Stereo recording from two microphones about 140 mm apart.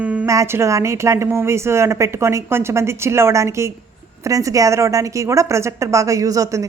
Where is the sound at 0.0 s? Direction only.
10° right (ahead or behind).